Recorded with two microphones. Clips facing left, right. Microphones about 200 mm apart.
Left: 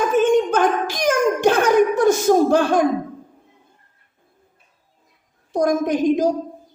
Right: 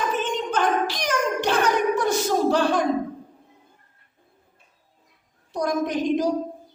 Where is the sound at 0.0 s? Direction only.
45° left (ahead or behind).